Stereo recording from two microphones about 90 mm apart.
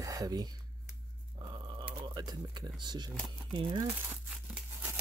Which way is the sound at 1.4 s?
60° right (ahead or behind).